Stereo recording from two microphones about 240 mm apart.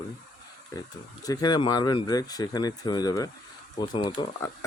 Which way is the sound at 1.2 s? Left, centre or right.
Centre.